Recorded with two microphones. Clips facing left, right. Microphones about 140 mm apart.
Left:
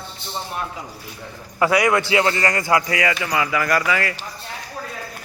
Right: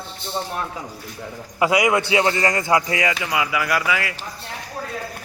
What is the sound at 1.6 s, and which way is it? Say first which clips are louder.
Speech: even; 20° right (ahead or behind).